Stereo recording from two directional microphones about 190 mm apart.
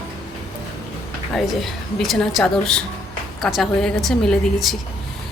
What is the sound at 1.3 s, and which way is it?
A man's voice, centre (ahead or behind).